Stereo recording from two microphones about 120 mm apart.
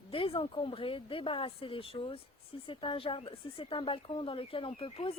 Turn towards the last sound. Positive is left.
turn(degrees=50)  # may be behind; listen again after turning